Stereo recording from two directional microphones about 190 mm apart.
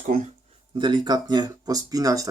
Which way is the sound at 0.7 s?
25° right (ahead or behind).